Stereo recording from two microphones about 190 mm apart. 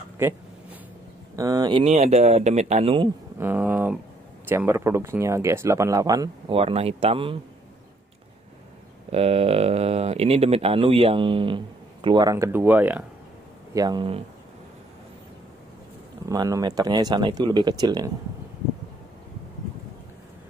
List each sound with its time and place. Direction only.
1.3 s speech: 20° right (ahead or behind)
3.3 s speech: 10° right (ahead or behind)
6.5 s speech: 30° right (ahead or behind)
9.1 s speech: 30° right (ahead or behind); by 13.0 s 10° right (ahead or behind)
13.7 s speech: 20° right (ahead or behind)
16.3 s speech: 15° right (ahead or behind)